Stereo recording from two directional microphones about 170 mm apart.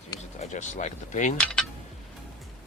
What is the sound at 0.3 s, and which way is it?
Speech, 40° left (ahead or behind).